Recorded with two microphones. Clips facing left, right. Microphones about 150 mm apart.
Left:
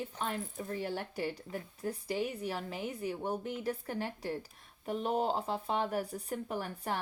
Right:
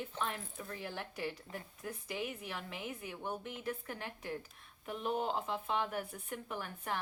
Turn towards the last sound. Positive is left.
turn(degrees=35)  # may be behind; listen again after turning